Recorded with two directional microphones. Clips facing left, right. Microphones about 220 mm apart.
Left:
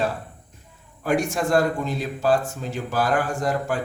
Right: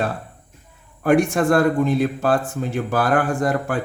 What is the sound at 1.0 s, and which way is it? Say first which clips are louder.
Speech: right 6 dB; 55° right (ahead or behind).